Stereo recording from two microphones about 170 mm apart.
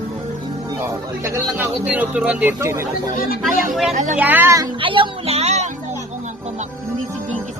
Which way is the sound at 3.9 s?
45° right (ahead or behind).